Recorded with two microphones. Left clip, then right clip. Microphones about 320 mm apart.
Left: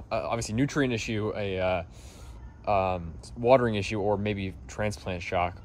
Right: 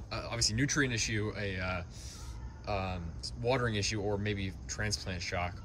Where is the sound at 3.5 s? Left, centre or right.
Centre.